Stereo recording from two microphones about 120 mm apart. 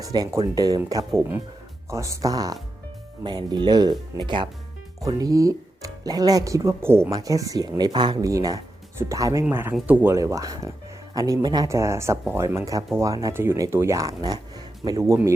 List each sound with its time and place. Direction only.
0.0 s speech: 30° right (ahead or behind); by 10.2 s 15° right (ahead or behind)
10.2 s speech: 25° right (ahead or behind)